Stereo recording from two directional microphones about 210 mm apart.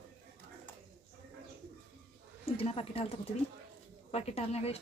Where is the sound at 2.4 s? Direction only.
30° left (ahead or behind).